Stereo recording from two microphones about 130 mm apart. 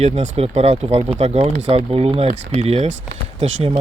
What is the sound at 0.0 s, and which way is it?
Speech, 55° right (ahead or behind).